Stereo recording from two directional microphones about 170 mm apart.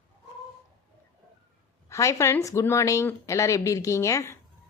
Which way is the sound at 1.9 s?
15° left (ahead or behind).